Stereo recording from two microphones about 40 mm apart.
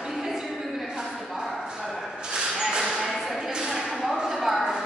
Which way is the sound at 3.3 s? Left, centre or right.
Centre.